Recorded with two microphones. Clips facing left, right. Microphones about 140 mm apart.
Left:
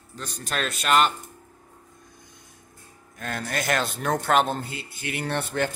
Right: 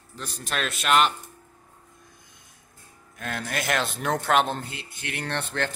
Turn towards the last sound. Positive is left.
turn(degrees=10)  # may be behind; listen again after turning